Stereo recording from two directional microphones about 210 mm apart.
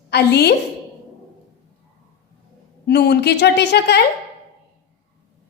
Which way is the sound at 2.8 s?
50° left (ahead or behind).